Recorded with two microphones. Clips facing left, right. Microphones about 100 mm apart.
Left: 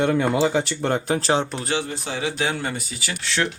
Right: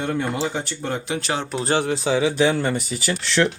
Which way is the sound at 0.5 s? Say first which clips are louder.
Left 5 dB; 90° left.